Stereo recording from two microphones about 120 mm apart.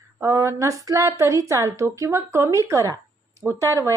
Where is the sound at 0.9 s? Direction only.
25° right (ahead or behind).